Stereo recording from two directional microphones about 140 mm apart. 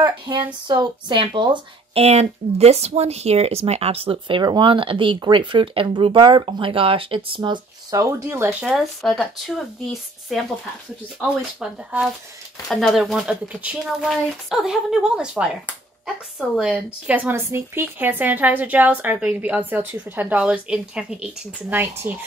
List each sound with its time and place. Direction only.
0.0 s speech: 35° right (ahead or behind); by 10.4 s centre (ahead or behind)
11.6 s speech: 10° right (ahead or behind)